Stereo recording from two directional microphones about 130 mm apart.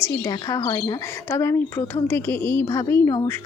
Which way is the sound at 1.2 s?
20° left (ahead or behind).